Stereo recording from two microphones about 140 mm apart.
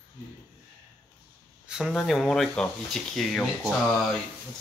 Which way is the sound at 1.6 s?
Centre (ahead or behind).